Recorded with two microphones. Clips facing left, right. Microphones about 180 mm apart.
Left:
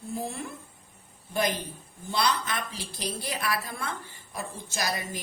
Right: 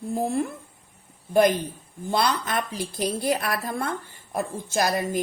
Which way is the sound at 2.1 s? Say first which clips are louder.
Right 4 dB; 50° right (ahead or behind).